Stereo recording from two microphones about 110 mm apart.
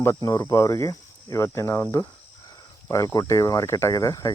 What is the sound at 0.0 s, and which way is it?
Speech, 25° left (ahead or behind).